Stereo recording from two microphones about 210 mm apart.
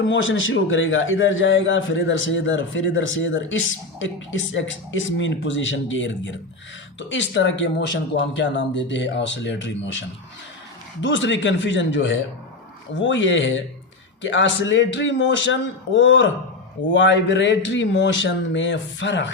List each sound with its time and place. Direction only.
0.0 s a man's voice: 65° left (ahead or behind)
11.0 s a man's voice: 60° left (ahead or behind)